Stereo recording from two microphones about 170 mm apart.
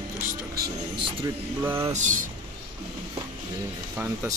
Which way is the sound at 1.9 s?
45° right (ahead or behind).